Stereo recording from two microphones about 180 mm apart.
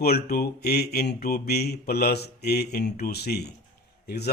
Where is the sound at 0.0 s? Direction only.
60° left (ahead or behind).